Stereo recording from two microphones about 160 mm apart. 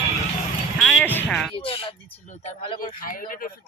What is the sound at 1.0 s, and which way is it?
Speech, 5° left (ahead or behind).